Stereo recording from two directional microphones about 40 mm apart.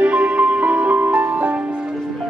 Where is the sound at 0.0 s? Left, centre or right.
Right.